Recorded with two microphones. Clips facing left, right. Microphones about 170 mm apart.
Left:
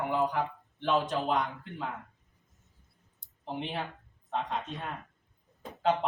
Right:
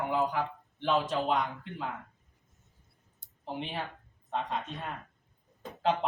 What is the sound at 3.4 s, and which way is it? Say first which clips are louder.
Speech: left 1 dB; centre (ahead or behind).